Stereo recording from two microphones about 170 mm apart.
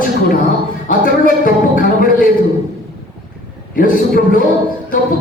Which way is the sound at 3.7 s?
55° left (ahead or behind).